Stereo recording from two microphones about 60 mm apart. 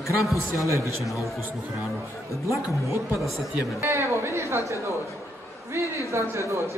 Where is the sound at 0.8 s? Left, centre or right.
Left.